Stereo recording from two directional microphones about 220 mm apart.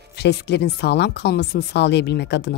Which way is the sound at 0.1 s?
50° left (ahead or behind).